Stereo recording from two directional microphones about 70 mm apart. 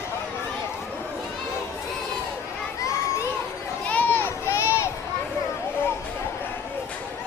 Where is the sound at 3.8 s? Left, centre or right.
Left.